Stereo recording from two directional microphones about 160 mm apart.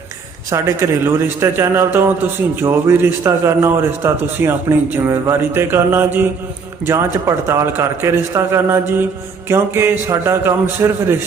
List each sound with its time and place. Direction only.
0.5 s a man's voice: 15° right (ahead or behind)